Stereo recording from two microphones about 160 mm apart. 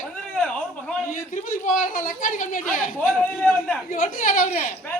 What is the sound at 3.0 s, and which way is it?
Speech, 10° left (ahead or behind).